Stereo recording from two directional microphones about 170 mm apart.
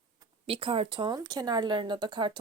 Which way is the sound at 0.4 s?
30° right (ahead or behind).